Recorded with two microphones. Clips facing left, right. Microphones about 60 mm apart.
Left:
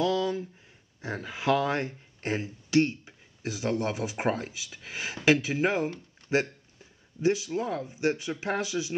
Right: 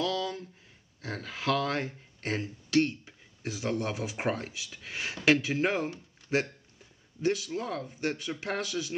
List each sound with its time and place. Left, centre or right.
0.0 s a sound: centre
1.0 s speech: centre
7.2 s speech: centre